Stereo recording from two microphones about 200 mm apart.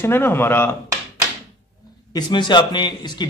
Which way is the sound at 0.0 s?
10° left (ahead or behind).